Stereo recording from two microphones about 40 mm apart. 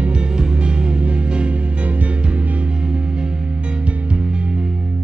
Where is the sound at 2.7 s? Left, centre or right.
Right.